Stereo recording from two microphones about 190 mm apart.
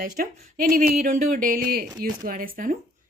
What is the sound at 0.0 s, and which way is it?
Speech, 45° right (ahead or behind).